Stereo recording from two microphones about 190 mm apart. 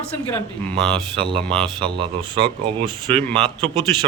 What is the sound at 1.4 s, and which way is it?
Speech, 5° left (ahead or behind).